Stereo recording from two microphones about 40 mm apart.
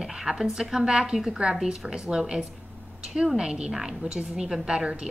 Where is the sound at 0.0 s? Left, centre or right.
Centre.